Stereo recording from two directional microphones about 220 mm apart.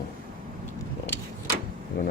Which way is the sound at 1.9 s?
40° left (ahead or behind).